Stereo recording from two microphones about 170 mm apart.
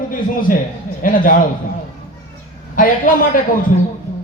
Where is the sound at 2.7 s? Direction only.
55° left (ahead or behind).